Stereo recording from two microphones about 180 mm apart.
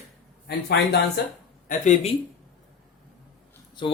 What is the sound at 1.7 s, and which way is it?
Speech, 40° left (ahead or behind).